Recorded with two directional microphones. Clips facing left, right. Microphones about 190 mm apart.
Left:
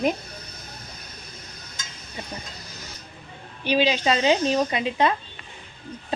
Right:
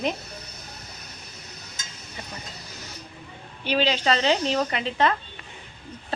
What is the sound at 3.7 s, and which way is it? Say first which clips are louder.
A woman's voice: left 2 dB; 15° left (ahead or behind).